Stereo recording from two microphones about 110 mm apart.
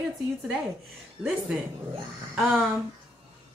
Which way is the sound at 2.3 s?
5° left (ahead or behind).